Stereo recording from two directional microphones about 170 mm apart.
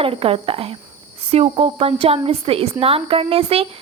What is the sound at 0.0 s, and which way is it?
Speech, 35° right (ahead or behind).